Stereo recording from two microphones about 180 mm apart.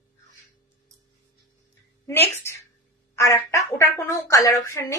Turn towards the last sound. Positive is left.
turn(degrees=15)  # may be behind; listen again after turning